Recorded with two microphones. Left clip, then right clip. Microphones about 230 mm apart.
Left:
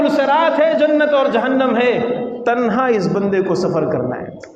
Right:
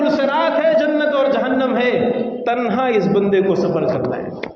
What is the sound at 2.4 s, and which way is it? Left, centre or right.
A man's voice, left.